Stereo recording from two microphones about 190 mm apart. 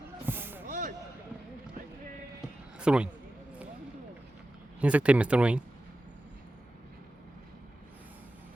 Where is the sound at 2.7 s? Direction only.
5° right (ahead or behind).